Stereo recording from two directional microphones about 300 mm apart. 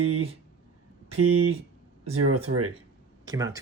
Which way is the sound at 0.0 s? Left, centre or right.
Right.